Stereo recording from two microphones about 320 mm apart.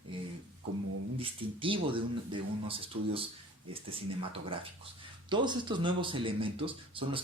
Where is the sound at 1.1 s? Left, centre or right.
Centre.